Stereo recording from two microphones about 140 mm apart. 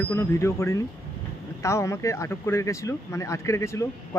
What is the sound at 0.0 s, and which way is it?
Speech, 15° left (ahead or behind).